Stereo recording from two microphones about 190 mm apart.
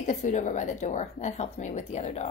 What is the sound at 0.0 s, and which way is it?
A woman's voice, 40° left (ahead or behind).